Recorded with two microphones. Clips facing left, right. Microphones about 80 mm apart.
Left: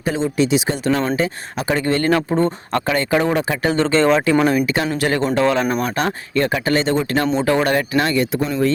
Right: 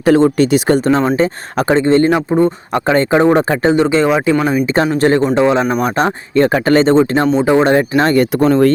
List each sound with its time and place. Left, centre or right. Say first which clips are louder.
0.0 s speech: right 9 dB; right
0.9 s speech: right 6 dB; right
1.7 s speech: right 6 dB; right
2.8 s speech: right 8 dB; right
3.8 s speech: right 3 dB; centre
4.6 s speech: right 7 dB; right
5.3 s speech: right 5 dB; right
8.1 s speech: right 8 dB; right